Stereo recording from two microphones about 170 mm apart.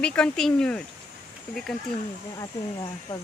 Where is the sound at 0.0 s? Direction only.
5° left (ahead or behind).